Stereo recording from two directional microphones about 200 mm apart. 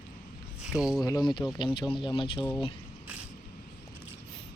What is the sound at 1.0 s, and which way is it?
Speech, 20° left (ahead or behind).